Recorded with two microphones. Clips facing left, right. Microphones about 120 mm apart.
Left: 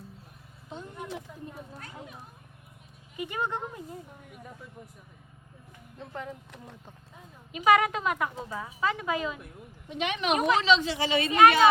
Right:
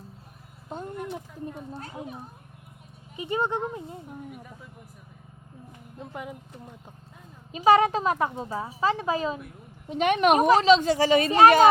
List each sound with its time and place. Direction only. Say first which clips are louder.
0.7 s vehicle: right 5 dB; 45° right (ahead or behind)
1.7 s speech: right 6 dB; 30° right (ahead or behind)
3.2 s speech: right 5 dB; 25° right (ahead or behind)
6.0 s speech: right 1 dB; 15° right (ahead or behind)
7.5 s a woman's voice: right 4 dB; 30° right (ahead or behind)
9.9 s speech: right 8 dB; 50° right (ahead or behind)
10.3 s speech: right 3 dB; 40° right (ahead or behind)